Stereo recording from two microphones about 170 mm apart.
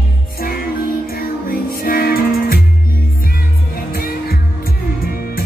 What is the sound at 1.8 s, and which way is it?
Music, 60° left (ahead or behind).